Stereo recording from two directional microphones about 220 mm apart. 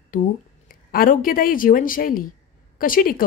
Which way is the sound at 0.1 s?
40° left (ahead or behind).